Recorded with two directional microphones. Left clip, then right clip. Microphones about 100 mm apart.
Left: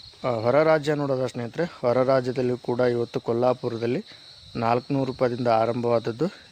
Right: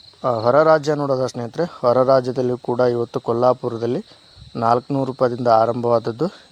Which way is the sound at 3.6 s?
30° right (ahead or behind).